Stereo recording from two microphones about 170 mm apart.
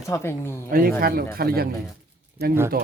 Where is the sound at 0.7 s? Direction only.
60° right (ahead or behind).